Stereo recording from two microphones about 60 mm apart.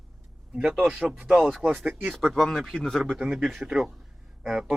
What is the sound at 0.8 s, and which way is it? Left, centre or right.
Speech, centre.